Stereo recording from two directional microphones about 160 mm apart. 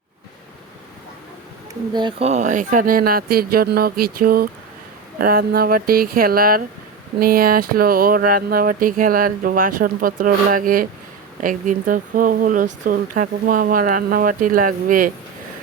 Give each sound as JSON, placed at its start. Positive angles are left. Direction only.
{"t": 1.9, "sound": "speech", "side_deg": -30}
{"t": 2.2, "sound": "speech", "side_deg": -50}